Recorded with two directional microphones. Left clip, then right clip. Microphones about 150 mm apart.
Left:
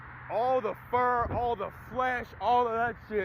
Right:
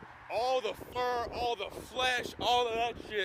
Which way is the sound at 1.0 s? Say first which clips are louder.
Left 4 dB; 50° right (ahead or behind).